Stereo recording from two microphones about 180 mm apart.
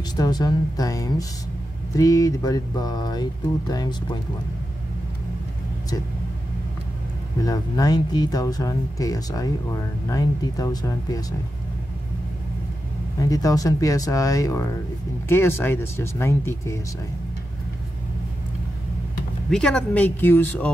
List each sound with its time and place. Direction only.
0.1 s speech: 20° left (ahead or behind)
7.4 s speech: 20° left (ahead or behind)
13.2 s speech: 20° left (ahead or behind)
19.5 s speech: 5° left (ahead or behind)